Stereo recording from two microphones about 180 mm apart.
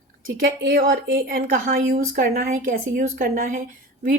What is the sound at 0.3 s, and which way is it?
Speech, 55° right (ahead or behind).